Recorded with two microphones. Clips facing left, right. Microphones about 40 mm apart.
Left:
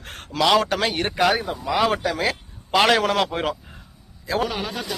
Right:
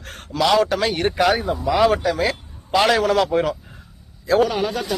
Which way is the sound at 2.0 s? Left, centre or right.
Left.